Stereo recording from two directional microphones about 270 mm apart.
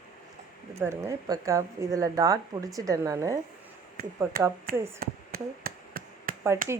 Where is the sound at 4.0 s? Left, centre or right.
Right.